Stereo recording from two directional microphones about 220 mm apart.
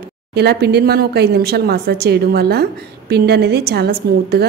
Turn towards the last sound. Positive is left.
turn(degrees=-45)  # may be behind; listen again after turning